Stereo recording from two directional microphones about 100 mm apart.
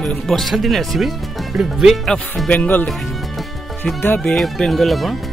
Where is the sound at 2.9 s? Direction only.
Centre (ahead or behind).